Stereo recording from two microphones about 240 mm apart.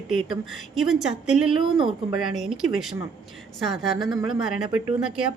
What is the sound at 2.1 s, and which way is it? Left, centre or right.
A woman's voice, centre.